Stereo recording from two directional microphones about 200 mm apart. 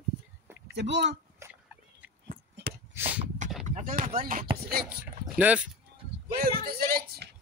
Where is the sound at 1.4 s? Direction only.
10° right (ahead or behind).